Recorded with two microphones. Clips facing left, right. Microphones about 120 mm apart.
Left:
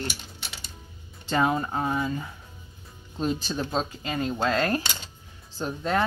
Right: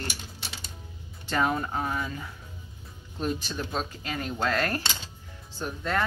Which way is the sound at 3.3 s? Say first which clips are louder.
Left 4 dB; 30° left (ahead or behind).